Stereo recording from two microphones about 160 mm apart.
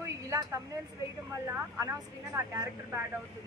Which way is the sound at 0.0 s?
20° right (ahead or behind).